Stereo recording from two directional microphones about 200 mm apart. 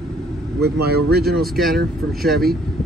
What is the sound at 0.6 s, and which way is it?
Speech, 55° right (ahead or behind).